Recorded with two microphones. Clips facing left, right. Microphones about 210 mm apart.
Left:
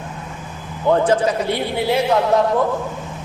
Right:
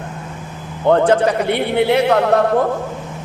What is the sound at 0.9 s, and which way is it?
A man's voice, 65° right (ahead or behind).